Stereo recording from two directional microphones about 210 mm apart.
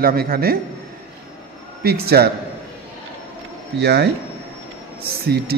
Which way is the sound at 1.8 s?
45° right (ahead or behind).